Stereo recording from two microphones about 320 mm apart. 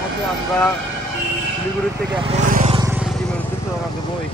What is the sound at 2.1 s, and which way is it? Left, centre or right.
Speech, centre.